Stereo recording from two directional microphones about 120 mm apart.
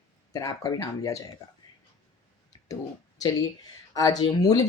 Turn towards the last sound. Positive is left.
turn(degrees=30)  # may be behind; listen again after turning